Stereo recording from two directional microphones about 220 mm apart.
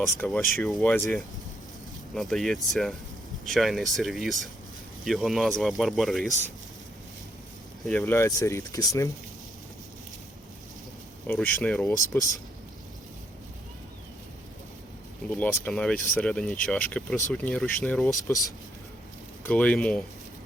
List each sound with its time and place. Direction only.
0.3 s speech: centre (ahead or behind)
7.9 s speech: 10° left (ahead or behind)
11.3 s speech: 10° left (ahead or behind)
15.3 s speech: 5° left (ahead or behind)
18.1 s speech: 15° left (ahead or behind)